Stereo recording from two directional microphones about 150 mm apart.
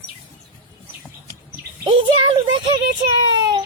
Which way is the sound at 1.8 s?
35° right (ahead or behind).